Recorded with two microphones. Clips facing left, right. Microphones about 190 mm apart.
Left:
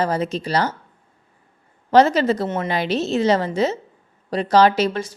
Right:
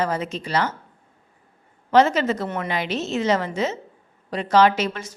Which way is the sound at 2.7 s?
35° left (ahead or behind).